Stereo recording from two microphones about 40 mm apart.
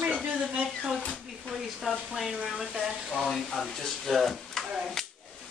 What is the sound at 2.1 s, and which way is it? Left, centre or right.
Speech, centre.